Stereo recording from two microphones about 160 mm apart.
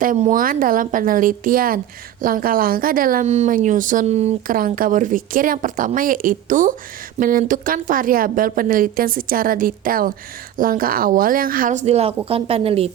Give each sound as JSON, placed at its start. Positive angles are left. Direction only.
{"t": 0.0, "sound": "a woman's voice", "side_deg": -55}
{"t": 3.2, "sound": "speech", "side_deg": -45}
{"t": 4.4, "sound": "a woman's voice", "side_deg": -60}